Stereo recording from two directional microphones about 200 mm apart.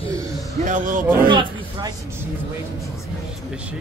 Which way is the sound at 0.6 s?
40° right (ahead or behind).